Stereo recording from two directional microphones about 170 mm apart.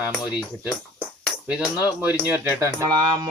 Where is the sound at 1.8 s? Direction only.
10° right (ahead or behind).